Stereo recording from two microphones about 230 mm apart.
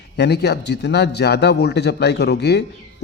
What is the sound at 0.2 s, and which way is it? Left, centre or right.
A man's voice, left.